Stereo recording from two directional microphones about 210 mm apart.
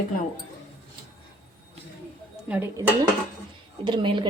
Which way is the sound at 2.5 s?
10° right (ahead or behind).